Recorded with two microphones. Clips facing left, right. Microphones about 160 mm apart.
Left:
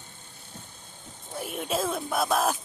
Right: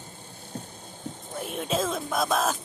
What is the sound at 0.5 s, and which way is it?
Vehicle, 35° right (ahead or behind).